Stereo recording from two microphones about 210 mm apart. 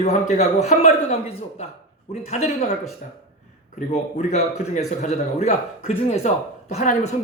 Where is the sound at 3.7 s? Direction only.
30° left (ahead or behind).